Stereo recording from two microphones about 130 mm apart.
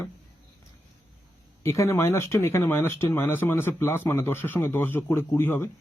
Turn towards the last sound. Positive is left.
turn(degrees=20)  # may be behind; listen again after turning